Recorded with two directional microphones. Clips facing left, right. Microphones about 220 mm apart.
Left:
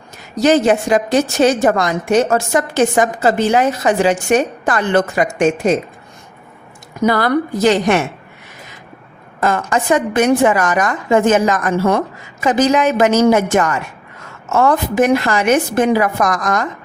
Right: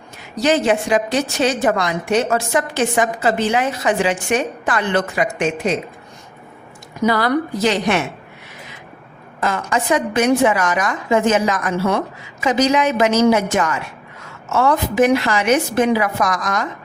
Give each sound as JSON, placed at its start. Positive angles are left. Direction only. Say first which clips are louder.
{"t": 0.4, "sound": "a woman's voice", "louder": "left 4 dB", "side_deg": 45}
{"t": 7.0, "sound": "a woman's voice", "louder": "left 2 dB", "side_deg": 50}
{"t": 9.4, "sound": "a woman's voice", "louder": "left 4 dB", "side_deg": 50}